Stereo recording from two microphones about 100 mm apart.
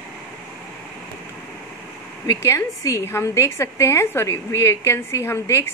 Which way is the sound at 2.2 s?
30° left (ahead or behind).